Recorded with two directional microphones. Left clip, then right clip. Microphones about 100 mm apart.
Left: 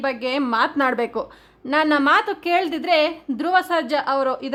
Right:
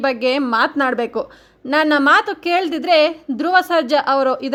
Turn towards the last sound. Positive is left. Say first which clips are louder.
# right 5 dB
turn(degrees=-35)  # may be behind; listen again after turning